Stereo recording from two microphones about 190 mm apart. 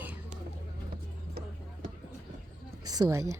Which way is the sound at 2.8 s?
20° right (ahead or behind).